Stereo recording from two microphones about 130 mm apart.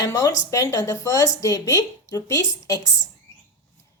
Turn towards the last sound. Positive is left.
turn(degrees=25)  # may be behind; listen again after turning